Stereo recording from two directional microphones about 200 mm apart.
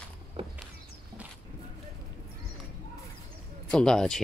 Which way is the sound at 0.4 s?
25° right (ahead or behind).